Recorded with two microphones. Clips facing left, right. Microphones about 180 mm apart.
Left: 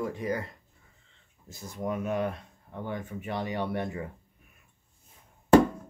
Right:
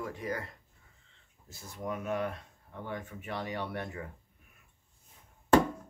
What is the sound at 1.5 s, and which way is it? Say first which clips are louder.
Speech: left 5 dB; 15° left (ahead or behind).